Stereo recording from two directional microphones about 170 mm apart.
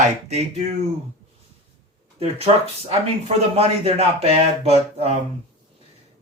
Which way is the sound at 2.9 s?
35° right (ahead or behind).